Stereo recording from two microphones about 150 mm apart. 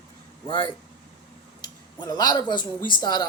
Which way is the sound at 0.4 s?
30° left (ahead or behind).